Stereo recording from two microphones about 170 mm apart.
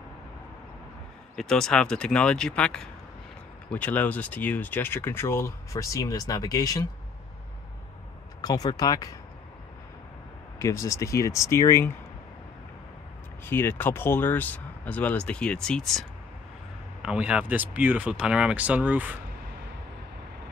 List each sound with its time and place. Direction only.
1.3 s speech: 5° left (ahead or behind); by 6.9 s 20° left (ahead or behind)
8.4 s speech: 20° left (ahead or behind)
10.6 s speech: 20° left (ahead or behind)
13.5 s speech: 15° left (ahead or behind); by 19.1 s 10° right (ahead or behind)